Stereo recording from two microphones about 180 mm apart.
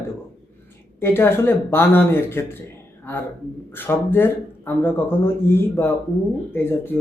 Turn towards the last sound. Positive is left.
turn(degrees=10)  # may be behind; listen again after turning